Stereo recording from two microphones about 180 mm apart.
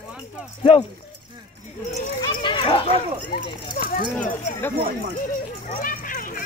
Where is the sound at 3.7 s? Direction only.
55° left (ahead or behind).